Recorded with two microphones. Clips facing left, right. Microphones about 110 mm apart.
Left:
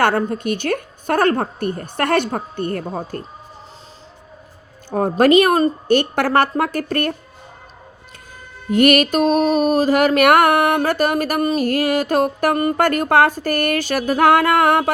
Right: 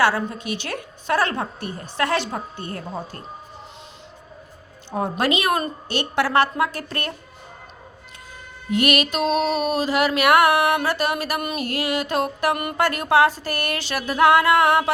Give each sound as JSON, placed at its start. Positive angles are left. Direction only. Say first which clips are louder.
{"t": 0.0, "sound": "mantra", "louder": "left 3 dB", "side_deg": 50}
{"t": 4.9, "sound": "mantra", "louder": "left 8 dB", "side_deg": 45}
{"t": 8.7, "sound": "mantra", "louder": "left 7 dB", "side_deg": 50}